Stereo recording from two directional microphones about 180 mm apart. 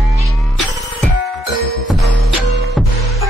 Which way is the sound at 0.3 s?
Centre (ahead or behind).